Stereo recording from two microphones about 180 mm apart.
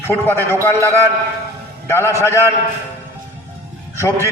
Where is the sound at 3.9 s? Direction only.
15° left (ahead or behind).